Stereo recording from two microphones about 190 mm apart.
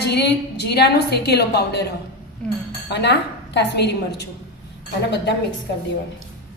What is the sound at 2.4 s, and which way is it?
Speech, 5° left (ahead or behind).